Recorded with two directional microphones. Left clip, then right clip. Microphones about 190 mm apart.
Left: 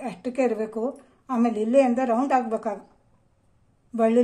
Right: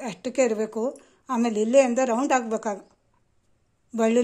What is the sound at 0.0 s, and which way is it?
Speech, 35° right (ahead or behind).